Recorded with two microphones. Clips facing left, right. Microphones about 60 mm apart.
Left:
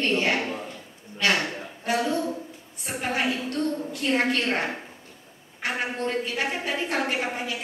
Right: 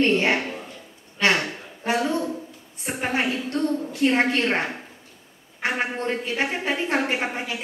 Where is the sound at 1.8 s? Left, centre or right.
Right.